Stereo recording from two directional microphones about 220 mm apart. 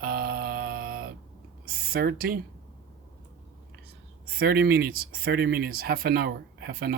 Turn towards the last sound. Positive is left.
turn(degrees=-45)  # may be behind; listen again after turning